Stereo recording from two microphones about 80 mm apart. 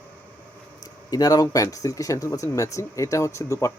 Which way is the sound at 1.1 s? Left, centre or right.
Left.